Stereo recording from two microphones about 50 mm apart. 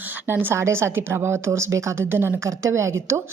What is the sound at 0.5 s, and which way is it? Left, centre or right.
Speech, right.